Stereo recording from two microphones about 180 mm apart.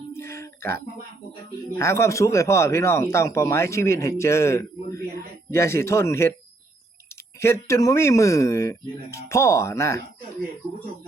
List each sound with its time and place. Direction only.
0.2 s a sound: 15° left (ahead or behind)
1.8 s speech: 15° left (ahead or behind)
7.3 s speech: 15° left (ahead or behind)